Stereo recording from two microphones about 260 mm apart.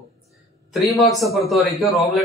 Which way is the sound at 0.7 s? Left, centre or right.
Centre.